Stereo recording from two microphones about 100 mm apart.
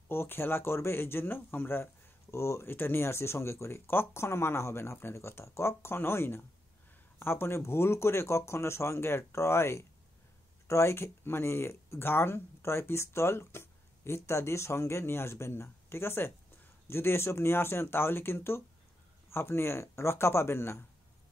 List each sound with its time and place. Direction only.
0.1 s speech: 25° left (ahead or behind)